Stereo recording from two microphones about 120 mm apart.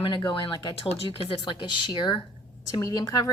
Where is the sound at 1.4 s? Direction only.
40° left (ahead or behind).